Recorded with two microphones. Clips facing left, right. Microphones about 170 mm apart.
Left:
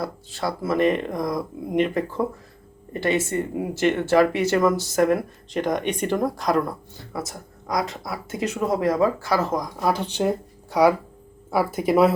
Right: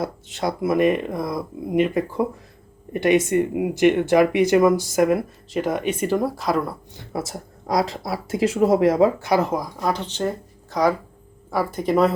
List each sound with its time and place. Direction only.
0.0 s speech: 20° right (ahead or behind); by 6.7 s 5° right (ahead or behind)
7.1 s speech: 25° right (ahead or behind)
9.7 s speech: 5° left (ahead or behind)